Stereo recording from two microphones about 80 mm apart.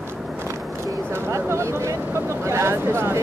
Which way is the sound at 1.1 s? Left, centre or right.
Right.